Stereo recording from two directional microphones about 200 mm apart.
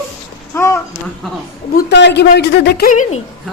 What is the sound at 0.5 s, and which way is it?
Speech, 15° left (ahead or behind).